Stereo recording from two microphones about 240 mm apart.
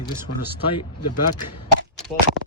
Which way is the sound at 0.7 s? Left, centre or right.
Left.